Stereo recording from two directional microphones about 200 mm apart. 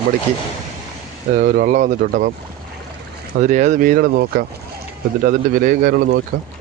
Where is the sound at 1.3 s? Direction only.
45° right (ahead or behind).